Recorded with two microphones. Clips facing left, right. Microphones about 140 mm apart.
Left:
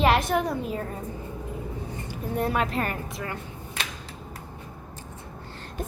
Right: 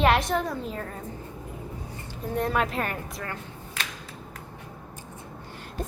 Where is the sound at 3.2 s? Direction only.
15° left (ahead or behind).